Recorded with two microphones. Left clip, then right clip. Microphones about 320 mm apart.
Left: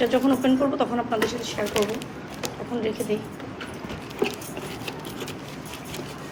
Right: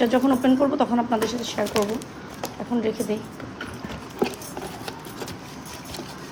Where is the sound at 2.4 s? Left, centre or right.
Right.